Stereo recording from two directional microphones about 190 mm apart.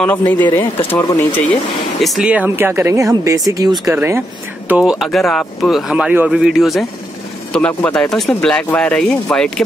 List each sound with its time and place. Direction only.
0.0 s speech: 10° left (ahead or behind)
2.0 s speech: centre (ahead or behind)